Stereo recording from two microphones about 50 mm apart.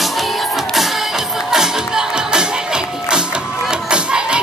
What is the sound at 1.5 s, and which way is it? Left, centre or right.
Music, centre.